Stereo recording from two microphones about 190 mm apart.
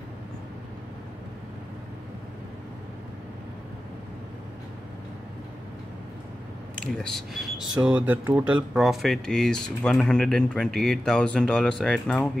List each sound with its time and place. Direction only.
6.8 s speech: 5° left (ahead or behind)